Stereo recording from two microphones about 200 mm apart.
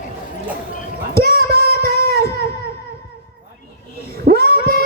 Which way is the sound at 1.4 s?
50° right (ahead or behind).